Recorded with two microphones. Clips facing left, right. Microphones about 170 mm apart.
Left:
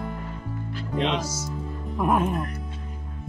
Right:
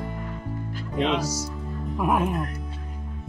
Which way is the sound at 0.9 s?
5° right (ahead or behind).